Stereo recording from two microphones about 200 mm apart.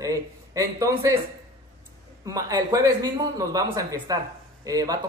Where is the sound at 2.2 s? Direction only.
15° right (ahead or behind).